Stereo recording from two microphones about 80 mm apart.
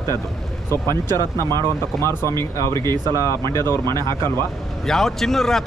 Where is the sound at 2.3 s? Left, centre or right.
Left.